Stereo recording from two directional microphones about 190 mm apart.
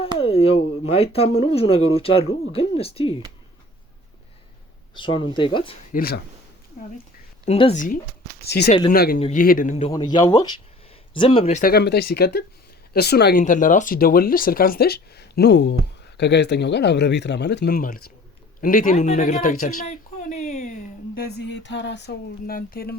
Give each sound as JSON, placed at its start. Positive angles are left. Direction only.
{"t": 0.2, "sound": "speech", "side_deg": 30}
{"t": 4.9, "sound": "speech", "side_deg": 25}
{"t": 5.9, "sound": "speech", "side_deg": 50}
{"t": 7.4, "sound": "speech", "side_deg": 35}
{"t": 8.4, "sound": "speech", "side_deg": 60}
{"t": 9.1, "sound": "speech", "side_deg": 40}
{"t": 9.9, "sound": "speech", "side_deg": 20}
{"t": 11.6, "sound": "speech", "side_deg": 55}
{"t": 13.4, "sound": "speech", "side_deg": 45}
{"t": 18.6, "sound": "a sound", "side_deg": 45}
{"t": 21.3, "sound": "speech", "side_deg": 65}